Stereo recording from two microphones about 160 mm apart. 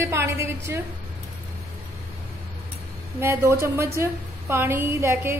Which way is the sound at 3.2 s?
15° right (ahead or behind).